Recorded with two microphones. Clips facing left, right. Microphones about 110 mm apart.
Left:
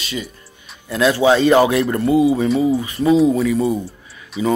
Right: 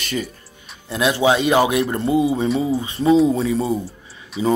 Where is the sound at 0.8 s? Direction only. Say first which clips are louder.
Left 3 dB; 20° right (ahead or behind).